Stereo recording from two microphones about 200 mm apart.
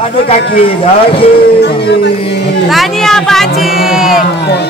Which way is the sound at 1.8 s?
60° left (ahead or behind).